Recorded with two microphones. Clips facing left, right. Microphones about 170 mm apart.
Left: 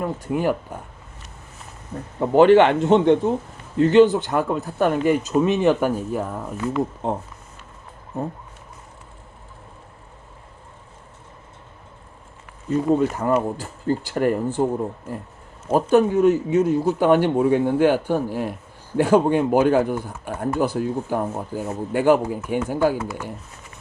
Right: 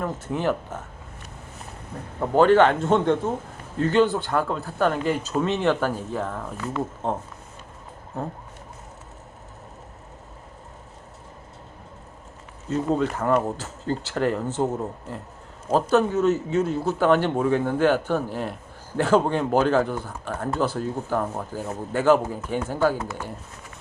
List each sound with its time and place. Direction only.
0.0 s speech: 10° left (ahead or behind)
2.6 s speech: 20° left (ahead or behind)
12.7 s speech: 10° left (ahead or behind)